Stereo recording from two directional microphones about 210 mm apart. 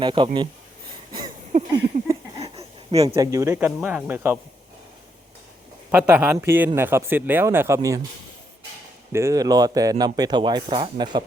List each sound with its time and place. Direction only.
0.0 s speech: 25° right (ahead or behind)
1.5 s a sound: 35° right (ahead or behind)
3.2 s speech: 15° right (ahead or behind)
5.9 s speech: 5° right (ahead or behind)
9.1 s speech: 15° right (ahead or behind)